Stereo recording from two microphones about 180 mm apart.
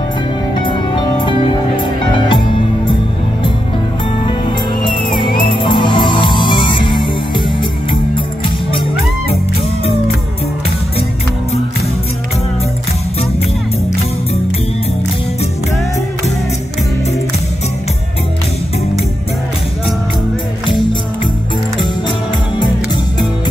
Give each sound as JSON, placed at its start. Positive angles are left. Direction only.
{"t": 0.6, "sound": "music", "side_deg": 25}
{"t": 5.2, "sound": "music", "side_deg": 30}